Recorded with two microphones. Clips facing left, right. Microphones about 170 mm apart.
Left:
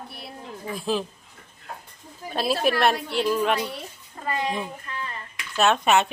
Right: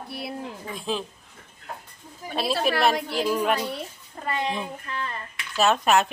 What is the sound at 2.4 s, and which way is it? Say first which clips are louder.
A woman's voice: left 1 dB; centre (ahead or behind).